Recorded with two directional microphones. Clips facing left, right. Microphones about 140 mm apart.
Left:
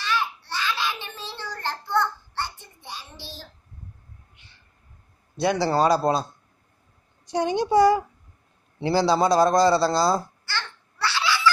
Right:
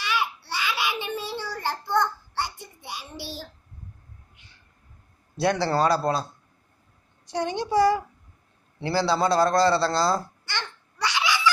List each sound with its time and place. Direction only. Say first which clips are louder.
0.0 s a sound: left 1 dB; 10° right (ahead or behind)
5.6 s a man's voice: left 4 dB; 15° left (ahead or behind)
7.2 s a man's voice: left 4 dB; 15° left (ahead or behind)
10.4 s babbling: left 1 dB; 15° right (ahead or behind)